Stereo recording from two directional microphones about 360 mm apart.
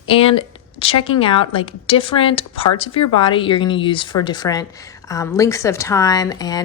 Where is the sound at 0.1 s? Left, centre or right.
Centre.